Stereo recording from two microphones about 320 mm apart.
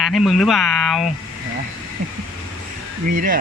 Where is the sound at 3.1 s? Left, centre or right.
Right.